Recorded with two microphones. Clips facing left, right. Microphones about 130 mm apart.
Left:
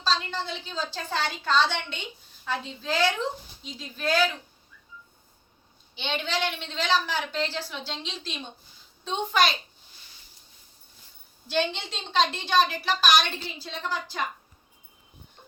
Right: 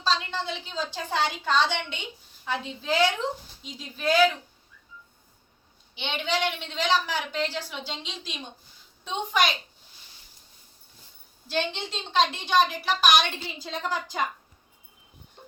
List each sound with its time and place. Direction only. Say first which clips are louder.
0.0 s a woman's voice: right 1 dB; 20° right (ahead or behind)
6.0 s a woman's voice: right 1 dB; 15° right (ahead or behind)
11.5 s a woman's voice: left 2 dB; 5° right (ahead or behind)